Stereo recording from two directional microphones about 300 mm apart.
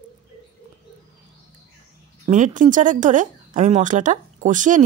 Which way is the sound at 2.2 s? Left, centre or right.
Right.